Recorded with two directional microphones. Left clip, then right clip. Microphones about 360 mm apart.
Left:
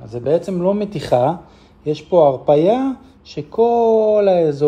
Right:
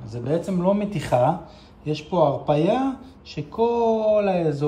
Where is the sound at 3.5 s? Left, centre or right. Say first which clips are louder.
Left 7 dB; left.